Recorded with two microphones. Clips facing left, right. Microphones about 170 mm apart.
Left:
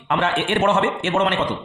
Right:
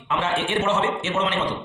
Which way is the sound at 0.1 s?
60° left (ahead or behind).